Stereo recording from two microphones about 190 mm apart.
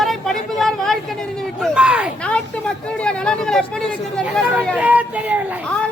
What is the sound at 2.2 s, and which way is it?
Speech, 5° left (ahead or behind).